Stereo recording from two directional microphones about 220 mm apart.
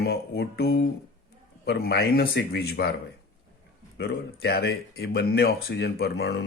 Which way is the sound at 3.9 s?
45° left (ahead or behind).